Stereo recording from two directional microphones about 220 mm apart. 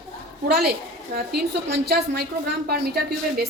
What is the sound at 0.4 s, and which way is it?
Speech, 45° right (ahead or behind).